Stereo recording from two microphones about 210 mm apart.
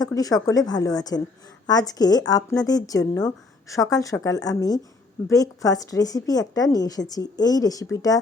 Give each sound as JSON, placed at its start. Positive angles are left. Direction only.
{"t": 0.0, "sound": "a woman's voice", "side_deg": 15}